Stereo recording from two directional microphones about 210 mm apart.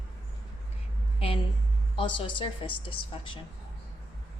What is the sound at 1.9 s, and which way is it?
A woman's voice, 25° left (ahead or behind).